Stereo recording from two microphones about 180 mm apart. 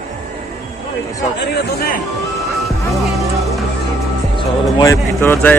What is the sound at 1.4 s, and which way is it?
Speech, 65° left (ahead or behind).